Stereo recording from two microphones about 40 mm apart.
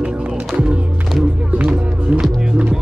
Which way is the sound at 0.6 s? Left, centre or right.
Right.